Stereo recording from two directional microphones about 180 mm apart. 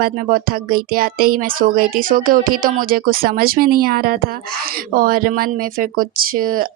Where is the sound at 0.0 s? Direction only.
55° right (ahead or behind).